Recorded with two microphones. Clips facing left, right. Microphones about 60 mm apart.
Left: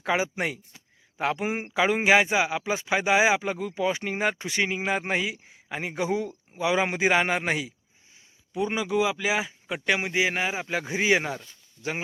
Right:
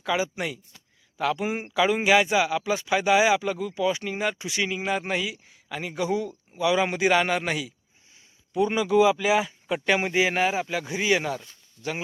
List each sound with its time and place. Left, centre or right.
0.0 s speech: left
4.8 s speech: left
8.5 s speech: centre
10.7 s speech: left